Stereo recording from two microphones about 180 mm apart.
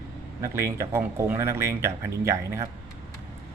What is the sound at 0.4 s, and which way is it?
Speech, 15° right (ahead or behind).